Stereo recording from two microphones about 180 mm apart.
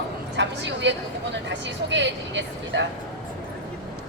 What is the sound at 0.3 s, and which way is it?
Speech, 80° right.